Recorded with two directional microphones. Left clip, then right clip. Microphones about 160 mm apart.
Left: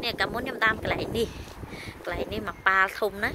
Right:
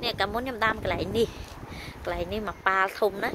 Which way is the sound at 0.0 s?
10° right (ahead or behind).